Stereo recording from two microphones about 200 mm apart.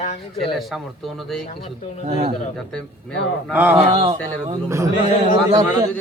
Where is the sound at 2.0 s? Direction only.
30° right (ahead or behind).